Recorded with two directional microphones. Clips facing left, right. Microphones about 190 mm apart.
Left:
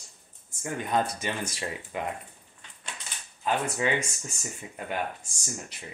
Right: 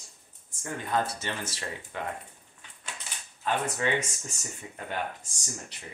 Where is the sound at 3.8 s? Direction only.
10° left (ahead or behind).